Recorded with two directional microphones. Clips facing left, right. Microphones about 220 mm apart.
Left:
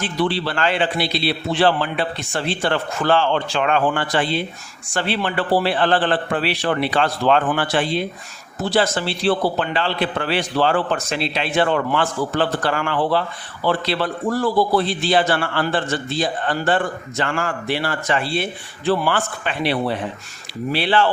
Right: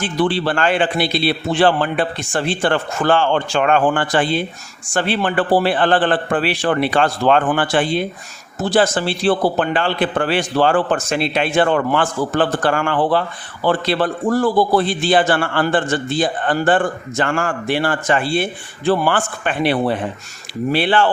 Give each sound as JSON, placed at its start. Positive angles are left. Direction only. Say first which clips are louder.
{"t": 0.0, "sound": "a man's voice", "louder": "right 3 dB", "side_deg": -50}